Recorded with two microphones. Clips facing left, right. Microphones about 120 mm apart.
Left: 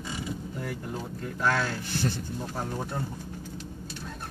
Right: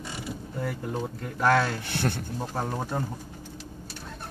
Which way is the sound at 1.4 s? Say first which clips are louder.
Right 5 dB; 60° right (ahead or behind).